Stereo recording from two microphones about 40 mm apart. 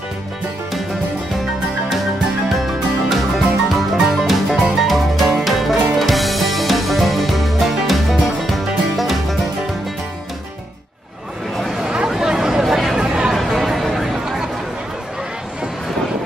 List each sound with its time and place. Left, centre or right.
3.1 s music: centre
12.2 s a sound: centre
13.0 s chatter: right
13.4 s chatter: centre